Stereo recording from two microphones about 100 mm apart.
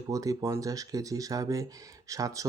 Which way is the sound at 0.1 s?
35° right (ahead or behind).